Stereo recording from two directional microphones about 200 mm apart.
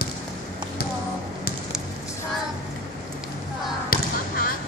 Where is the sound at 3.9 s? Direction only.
45° left (ahead or behind).